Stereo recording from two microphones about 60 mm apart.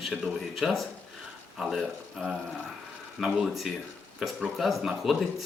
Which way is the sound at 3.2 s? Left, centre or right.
Centre.